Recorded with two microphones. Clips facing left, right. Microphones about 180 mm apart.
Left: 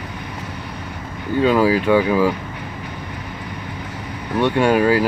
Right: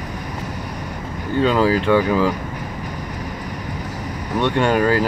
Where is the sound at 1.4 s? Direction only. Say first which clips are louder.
Left 1 dB; 10° left (ahead or behind).